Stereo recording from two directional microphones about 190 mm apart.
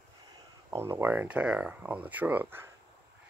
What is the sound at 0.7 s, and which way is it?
Speech, 15° right (ahead or behind).